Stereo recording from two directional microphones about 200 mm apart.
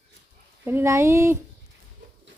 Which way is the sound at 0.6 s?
10° right (ahead or behind).